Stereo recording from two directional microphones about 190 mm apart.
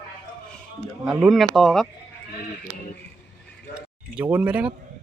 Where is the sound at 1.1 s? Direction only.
Centre (ahead or behind).